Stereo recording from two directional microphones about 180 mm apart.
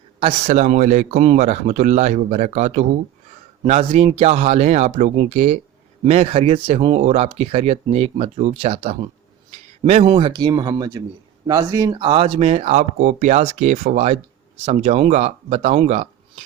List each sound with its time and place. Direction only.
0.2 s speech: 35° right (ahead or behind)